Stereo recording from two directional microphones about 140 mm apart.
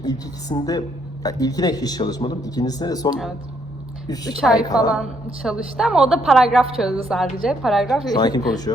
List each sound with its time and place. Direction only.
0.0 s a man's voice: 30° left (ahead or behind)
4.9 s a woman's voice: 5° right (ahead or behind)
8.1 s a man's voice: 30° left (ahead or behind)